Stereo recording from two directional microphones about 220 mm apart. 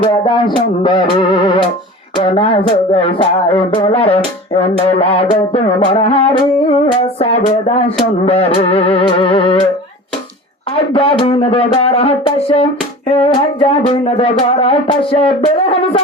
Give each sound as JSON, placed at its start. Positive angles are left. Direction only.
{"t": 0.0, "sound": "music", "side_deg": 20}
{"t": 2.1, "sound": "music", "side_deg": 25}
{"t": 10.9, "sound": "music", "side_deg": 25}